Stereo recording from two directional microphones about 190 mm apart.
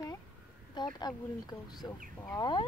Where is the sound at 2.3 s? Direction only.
25° left (ahead or behind).